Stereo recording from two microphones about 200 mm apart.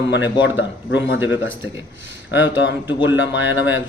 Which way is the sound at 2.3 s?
65° left (ahead or behind).